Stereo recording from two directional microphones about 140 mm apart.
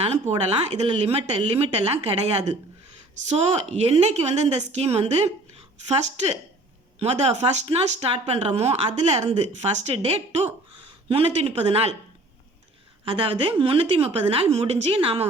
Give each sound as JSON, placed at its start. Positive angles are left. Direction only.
{"t": 0.0, "sound": "speech", "side_deg": -45}
{"t": 7.0, "sound": "speech", "side_deg": -50}
{"t": 13.1, "sound": "a woman's voice", "side_deg": -40}